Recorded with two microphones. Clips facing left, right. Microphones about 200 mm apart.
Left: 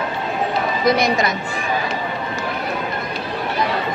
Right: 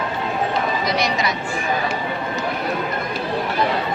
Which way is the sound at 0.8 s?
50° left (ahead or behind).